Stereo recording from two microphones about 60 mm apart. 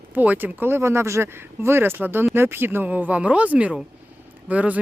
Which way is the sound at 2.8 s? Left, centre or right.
Right.